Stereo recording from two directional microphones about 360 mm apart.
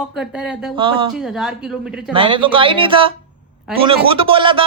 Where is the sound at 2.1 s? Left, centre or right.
Centre.